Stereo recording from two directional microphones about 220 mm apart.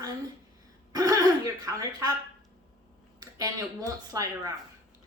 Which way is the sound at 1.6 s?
15° right (ahead or behind).